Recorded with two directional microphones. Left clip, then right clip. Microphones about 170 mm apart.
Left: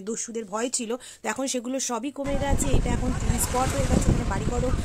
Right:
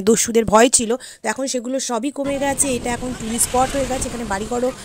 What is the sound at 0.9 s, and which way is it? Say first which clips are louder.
Speech: right 6 dB; 25° right (ahead or behind).